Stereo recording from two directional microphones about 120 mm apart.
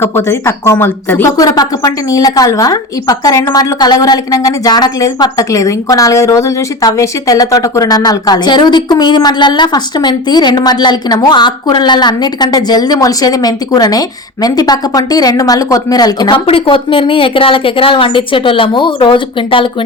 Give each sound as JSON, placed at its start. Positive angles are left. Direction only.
{"t": 0.0, "sound": "speech", "side_deg": 20}
{"t": 16.5, "sound": "a woman's voice", "side_deg": 45}